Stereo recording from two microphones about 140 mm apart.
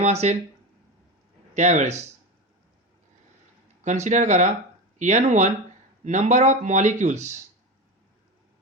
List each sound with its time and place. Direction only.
0.0 s speech: 50° right (ahead or behind)
1.5 s speech: 60° right (ahead or behind)
3.8 s speech: 55° right (ahead or behind)